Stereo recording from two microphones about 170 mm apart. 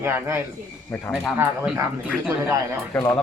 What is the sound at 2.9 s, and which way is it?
Speech, 10° left (ahead or behind).